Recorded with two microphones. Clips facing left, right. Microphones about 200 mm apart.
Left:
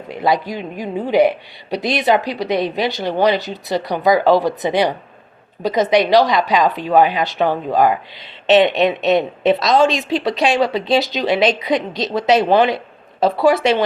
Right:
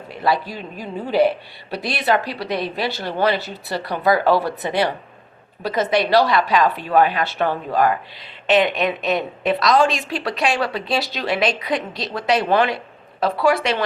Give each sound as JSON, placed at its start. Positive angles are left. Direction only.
{"t": 0.2, "sound": "a woman's voice", "side_deg": 15}